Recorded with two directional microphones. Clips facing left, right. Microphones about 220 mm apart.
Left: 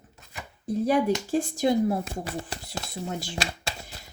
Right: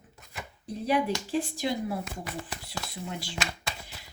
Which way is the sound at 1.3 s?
45° left (ahead or behind).